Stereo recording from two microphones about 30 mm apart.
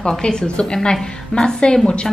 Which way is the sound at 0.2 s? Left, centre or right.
Left.